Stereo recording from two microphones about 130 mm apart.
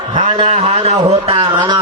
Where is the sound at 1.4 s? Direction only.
30° right (ahead or behind).